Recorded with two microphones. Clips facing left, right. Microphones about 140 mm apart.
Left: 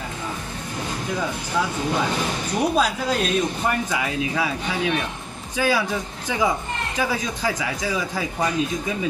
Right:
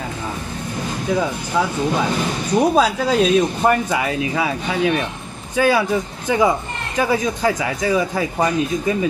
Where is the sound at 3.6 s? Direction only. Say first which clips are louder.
Right 6 dB; 60° right (ahead or behind).